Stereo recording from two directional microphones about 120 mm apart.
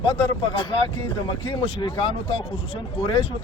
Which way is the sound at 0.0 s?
45° left (ahead or behind).